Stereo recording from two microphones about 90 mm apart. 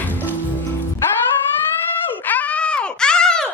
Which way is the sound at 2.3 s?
15° left (ahead or behind).